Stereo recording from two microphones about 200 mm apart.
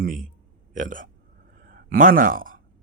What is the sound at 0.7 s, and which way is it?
Speech, 40° right (ahead or behind).